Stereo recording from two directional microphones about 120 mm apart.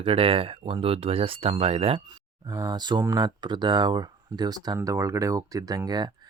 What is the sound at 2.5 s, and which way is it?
Speech, 30° right (ahead or behind).